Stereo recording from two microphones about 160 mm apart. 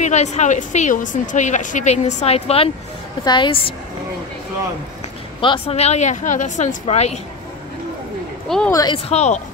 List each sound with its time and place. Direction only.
0.0 s a woman's voice: 45° left (ahead or behind)
5.4 s a woman's voice: 35° left (ahead or behind)
8.5 s a woman's voice: 5° left (ahead or behind)
8.9 s a woman's voice: 40° left (ahead or behind)